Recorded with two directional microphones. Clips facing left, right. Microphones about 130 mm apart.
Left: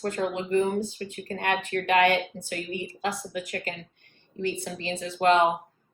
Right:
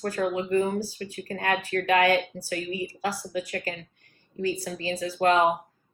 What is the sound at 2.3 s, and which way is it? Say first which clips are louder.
Speech: right 2 dB; 35° right (ahead or behind).